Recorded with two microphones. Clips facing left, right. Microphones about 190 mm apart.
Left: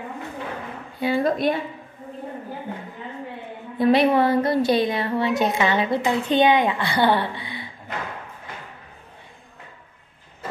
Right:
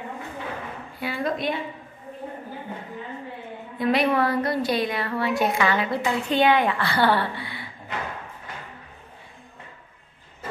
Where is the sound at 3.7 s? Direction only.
30° left (ahead or behind).